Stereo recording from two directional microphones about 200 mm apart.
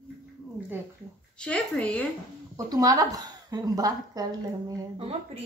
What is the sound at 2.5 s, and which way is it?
A woman's voice, 20° right (ahead or behind).